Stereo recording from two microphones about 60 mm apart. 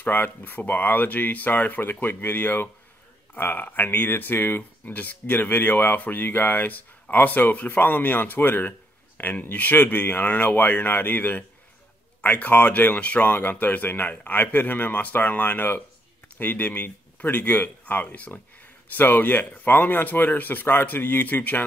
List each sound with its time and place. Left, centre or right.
0.0 s speech: left